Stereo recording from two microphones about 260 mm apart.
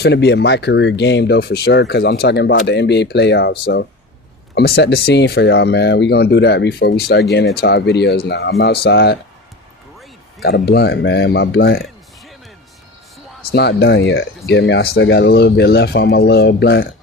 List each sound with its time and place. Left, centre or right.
0.0 s speech: left
10.4 s speech: left
13.5 s speech: left